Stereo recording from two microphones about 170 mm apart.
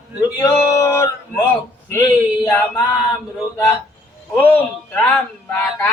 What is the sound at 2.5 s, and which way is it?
Speech, 10° left (ahead or behind).